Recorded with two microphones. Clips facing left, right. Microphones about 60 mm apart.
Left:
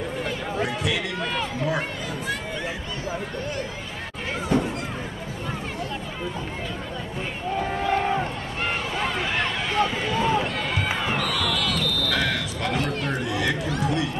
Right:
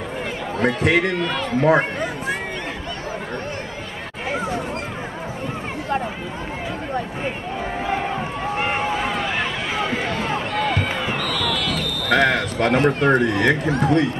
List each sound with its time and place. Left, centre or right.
0.6 s a man's voice: right
8.5 s run: right
9.0 s run: centre
9.8 s run: right
10.5 s run: centre
12.1 s speech: right